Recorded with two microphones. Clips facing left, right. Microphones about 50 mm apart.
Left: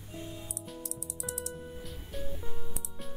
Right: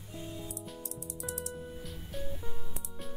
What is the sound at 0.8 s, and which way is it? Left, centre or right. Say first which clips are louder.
Music: even; right.